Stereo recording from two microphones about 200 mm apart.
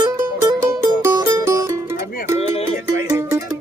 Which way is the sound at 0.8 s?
15° right (ahead or behind).